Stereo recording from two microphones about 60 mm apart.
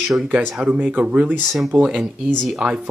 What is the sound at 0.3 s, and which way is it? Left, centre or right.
Speech, right.